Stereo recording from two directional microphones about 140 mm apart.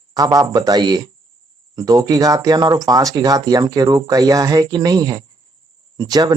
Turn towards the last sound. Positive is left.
turn(degrees=-30)  # may be behind; listen again after turning